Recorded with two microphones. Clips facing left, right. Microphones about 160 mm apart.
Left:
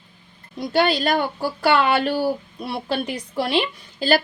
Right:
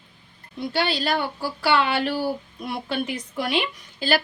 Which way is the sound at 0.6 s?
45° left (ahead or behind).